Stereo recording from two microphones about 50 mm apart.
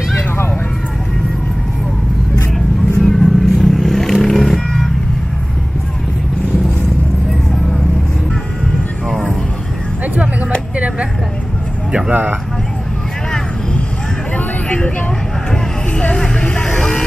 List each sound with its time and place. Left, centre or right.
3.0 s music: centre
12.1 s speech: right
16.3 s music: left